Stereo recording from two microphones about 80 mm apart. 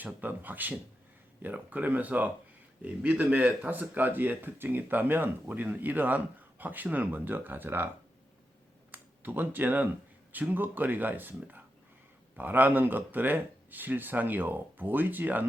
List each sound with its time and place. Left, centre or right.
0.0 s speech: right
8.9 s speech: right